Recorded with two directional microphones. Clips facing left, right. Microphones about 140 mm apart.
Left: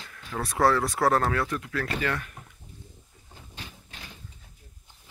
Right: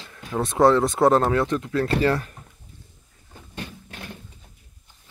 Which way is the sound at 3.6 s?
60° right (ahead or behind).